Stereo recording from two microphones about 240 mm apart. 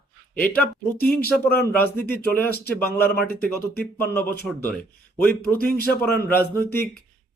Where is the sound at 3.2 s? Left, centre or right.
Left.